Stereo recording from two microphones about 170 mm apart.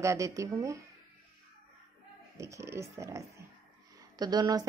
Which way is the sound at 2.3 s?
20° right (ahead or behind).